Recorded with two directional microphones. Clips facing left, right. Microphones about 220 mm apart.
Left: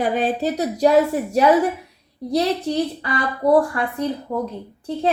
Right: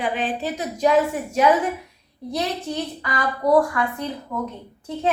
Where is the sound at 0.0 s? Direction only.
40° left (ahead or behind).